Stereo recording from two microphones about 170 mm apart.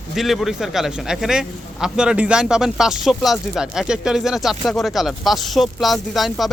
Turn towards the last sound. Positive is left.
turn(degrees=0)  # may be behind; listen again after turning